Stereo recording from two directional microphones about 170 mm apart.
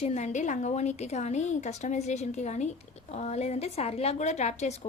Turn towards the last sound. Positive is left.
turn(degrees=40)  # may be behind; listen again after turning